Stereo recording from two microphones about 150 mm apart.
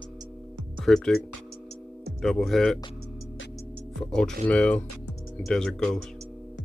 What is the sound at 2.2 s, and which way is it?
Speech, centre (ahead or behind).